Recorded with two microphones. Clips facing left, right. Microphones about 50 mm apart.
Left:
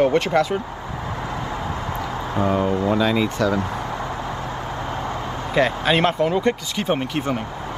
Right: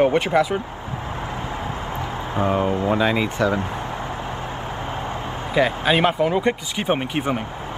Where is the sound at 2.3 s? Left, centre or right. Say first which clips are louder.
Even; right.